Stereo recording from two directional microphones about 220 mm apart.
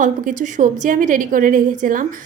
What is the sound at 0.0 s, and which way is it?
A woman's voice, 35° right (ahead or behind).